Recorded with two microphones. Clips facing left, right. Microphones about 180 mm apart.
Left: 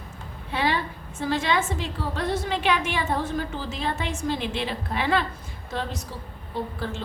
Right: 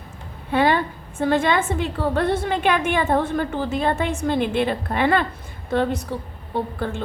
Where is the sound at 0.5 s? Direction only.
50° right (ahead or behind).